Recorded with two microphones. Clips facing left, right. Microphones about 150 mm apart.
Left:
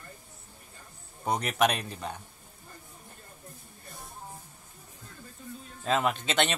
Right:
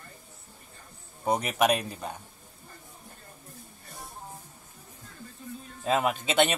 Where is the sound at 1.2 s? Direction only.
5° right (ahead or behind).